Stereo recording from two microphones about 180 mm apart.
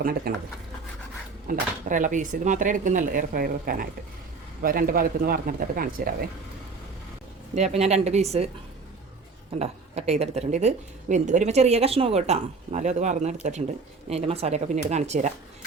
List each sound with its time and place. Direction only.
0.3 s speech: 55° right (ahead or behind)
1.5 s speech: 45° right (ahead or behind)
7.5 s speech: 35° right (ahead or behind)
9.6 s speech: 35° right (ahead or behind)